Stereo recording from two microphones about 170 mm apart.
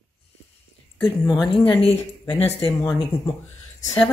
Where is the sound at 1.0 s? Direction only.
Centre (ahead or behind).